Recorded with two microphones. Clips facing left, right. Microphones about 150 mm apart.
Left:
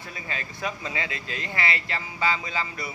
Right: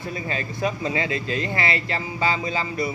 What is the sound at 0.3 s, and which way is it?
A man's voice, 30° right (ahead or behind).